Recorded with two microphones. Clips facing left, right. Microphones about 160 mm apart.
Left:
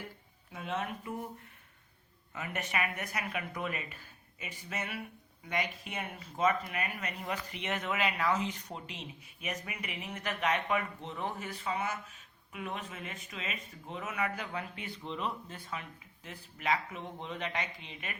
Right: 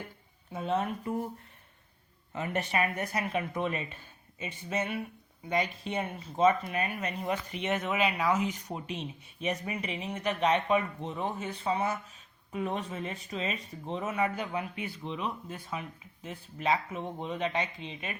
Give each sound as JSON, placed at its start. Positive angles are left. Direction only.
{"t": 0.5, "sound": "speech", "side_deg": -35}
{"t": 2.3, "sound": "speech", "side_deg": -30}